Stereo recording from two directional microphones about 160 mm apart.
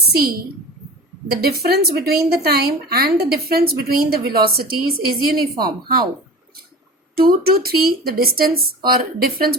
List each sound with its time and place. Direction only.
0.2 s a woman's voice: 70° right (ahead or behind)
5.4 s a woman's voice: 25° right (ahead or behind)
7.2 s a woman's voice: 70° right (ahead or behind)